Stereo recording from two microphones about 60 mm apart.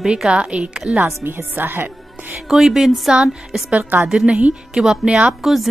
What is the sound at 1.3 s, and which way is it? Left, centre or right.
A woman's voice, right.